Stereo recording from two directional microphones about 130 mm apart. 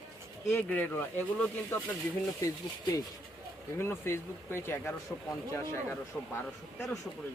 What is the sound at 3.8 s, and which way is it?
Speech, 20° left (ahead or behind).